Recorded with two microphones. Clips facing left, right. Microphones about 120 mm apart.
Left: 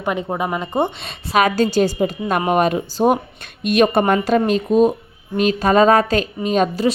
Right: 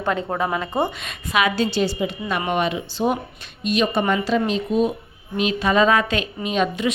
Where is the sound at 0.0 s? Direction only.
15° left (ahead or behind).